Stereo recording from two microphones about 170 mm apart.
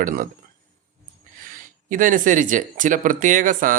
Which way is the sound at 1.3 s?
50° right (ahead or behind).